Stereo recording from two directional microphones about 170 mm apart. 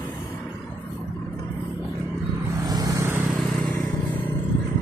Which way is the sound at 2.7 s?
20° right (ahead or behind).